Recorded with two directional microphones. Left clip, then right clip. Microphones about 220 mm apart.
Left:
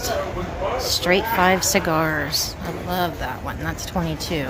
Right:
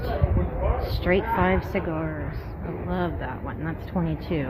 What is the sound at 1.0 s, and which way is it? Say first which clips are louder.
Speech: left 4 dB; 10° left (ahead or behind).